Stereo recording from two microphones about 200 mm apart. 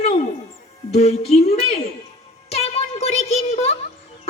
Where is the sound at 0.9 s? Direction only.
30° left (ahead or behind).